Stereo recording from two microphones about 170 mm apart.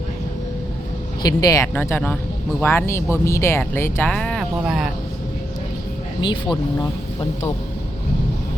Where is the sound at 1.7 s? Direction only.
10° left (ahead or behind).